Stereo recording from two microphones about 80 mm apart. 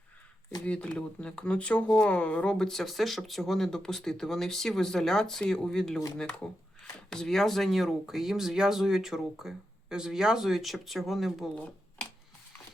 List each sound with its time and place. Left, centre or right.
0.6 s speech: centre
7.1 s speech: centre
11.5 s a sound: centre